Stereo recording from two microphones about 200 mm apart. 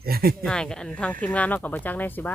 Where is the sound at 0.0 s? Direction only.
50° right (ahead or behind).